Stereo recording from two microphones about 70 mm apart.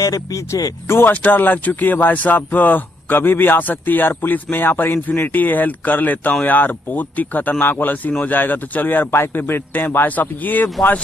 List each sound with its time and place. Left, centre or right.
0.0 s speech: left
0.8 s speech: left
1.1 s speech: left